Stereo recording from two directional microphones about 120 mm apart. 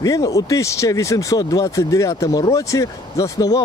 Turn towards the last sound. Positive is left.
turn(degrees=30)  # may be behind; listen again after turning